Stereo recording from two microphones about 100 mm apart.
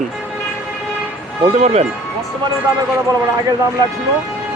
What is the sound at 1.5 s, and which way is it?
Speech, 90° right.